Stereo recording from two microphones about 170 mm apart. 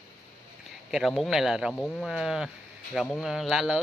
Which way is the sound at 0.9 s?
Centre (ahead or behind).